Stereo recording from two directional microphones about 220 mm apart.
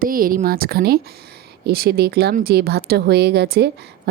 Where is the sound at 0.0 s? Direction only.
40° right (ahead or behind).